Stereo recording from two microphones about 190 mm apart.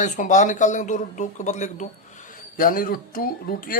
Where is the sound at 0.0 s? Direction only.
40° left (ahead or behind).